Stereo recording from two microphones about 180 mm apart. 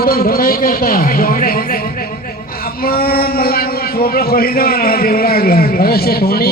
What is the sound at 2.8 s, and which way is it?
A man's voice, 55° left (ahead or behind).